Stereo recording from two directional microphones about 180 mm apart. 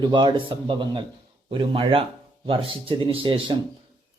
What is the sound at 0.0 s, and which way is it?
Speech, 25° right (ahead or behind).